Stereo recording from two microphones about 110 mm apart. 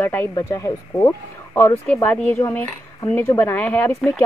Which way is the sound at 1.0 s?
20° left (ahead or behind).